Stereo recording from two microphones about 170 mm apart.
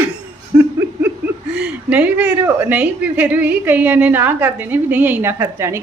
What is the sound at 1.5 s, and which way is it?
A woman's voice, 5° right (ahead or behind).